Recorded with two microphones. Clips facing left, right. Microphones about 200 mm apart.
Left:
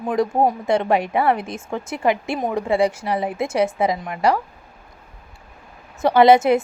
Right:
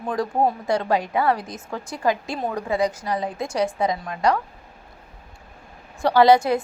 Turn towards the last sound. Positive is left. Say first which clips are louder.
# left 3 dB
turn(degrees=25)  # may be behind; listen again after turning